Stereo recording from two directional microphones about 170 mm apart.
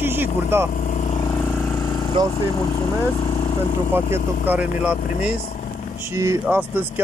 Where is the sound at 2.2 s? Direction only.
25° right (ahead or behind).